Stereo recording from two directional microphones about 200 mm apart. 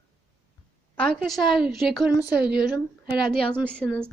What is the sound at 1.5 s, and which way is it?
Speech, centre (ahead or behind).